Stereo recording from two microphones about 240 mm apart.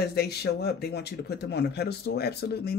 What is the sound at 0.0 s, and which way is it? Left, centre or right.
A man's voice, left.